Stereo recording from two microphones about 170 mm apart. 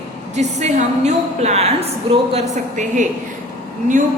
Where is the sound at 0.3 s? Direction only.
45° right (ahead or behind).